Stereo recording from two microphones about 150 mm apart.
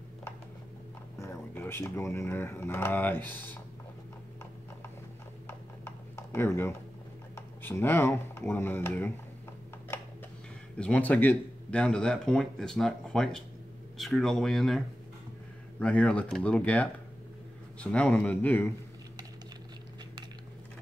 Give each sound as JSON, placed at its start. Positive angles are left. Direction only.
{"t": 1.1, "sound": "speech", "side_deg": 20}
{"t": 5.5, "sound": "computer keyboard", "side_deg": 15}
{"t": 7.3, "sound": "speech", "side_deg": 15}
{"t": 9.9, "sound": "a sound", "side_deg": 15}
{"t": 10.8, "sound": "speech", "side_deg": 10}
{"t": 15.8, "sound": "speech", "side_deg": 10}